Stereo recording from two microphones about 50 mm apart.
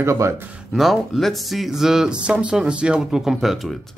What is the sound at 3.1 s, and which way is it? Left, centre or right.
Speech, centre.